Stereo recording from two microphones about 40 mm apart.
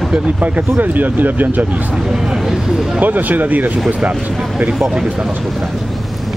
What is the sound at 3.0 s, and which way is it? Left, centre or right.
Speech, right.